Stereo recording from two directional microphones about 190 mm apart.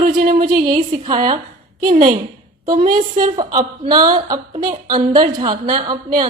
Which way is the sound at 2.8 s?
45° right (ahead or behind).